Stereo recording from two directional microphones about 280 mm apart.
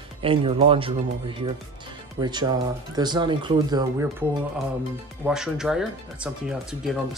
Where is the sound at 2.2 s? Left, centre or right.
Centre.